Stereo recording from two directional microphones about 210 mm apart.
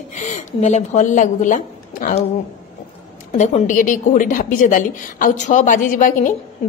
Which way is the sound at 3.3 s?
40° left (ahead or behind).